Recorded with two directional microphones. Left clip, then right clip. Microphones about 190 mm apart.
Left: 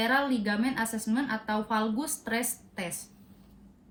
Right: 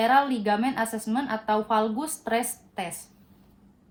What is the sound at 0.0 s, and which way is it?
Speech, 30° right (ahead or behind).